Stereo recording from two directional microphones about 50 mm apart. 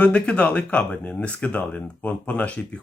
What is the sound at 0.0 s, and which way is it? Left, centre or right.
Speech, left.